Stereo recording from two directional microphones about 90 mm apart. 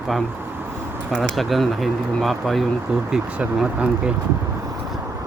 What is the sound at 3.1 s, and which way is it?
Speech, 10° right (ahead or behind).